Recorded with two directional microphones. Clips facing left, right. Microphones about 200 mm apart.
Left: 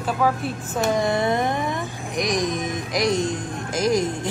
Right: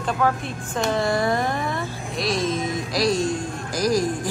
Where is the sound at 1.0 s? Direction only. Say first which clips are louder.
Left 1 dB; 20° left (ahead or behind).